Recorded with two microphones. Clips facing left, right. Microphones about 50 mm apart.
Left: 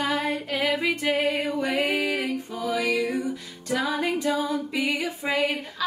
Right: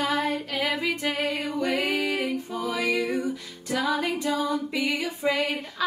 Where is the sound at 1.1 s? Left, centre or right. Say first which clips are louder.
Left 4 dB; left.